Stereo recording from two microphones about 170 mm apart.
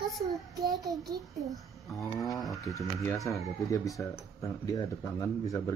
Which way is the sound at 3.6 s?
20° left (ahead or behind).